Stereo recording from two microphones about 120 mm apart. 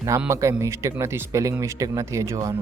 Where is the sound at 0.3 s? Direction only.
25° right (ahead or behind).